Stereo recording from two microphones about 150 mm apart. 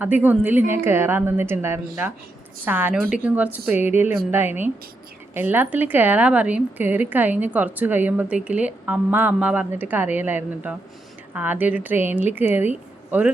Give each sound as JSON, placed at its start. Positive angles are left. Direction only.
{"t": 0.0, "sound": "a woman's voice", "side_deg": -10}